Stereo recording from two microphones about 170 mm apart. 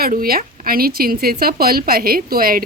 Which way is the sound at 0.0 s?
60° right (ahead or behind).